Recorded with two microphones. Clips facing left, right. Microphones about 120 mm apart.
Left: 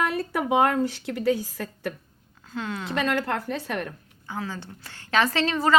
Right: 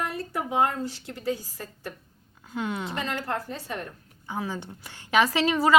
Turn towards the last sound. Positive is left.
turn(degrees=-10)  # may be behind; listen again after turning